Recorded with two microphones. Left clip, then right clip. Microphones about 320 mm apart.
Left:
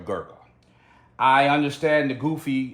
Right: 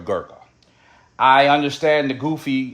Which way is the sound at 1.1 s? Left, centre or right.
Right.